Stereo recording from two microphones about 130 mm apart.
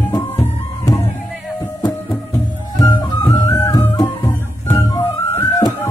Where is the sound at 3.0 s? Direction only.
25° left (ahead or behind).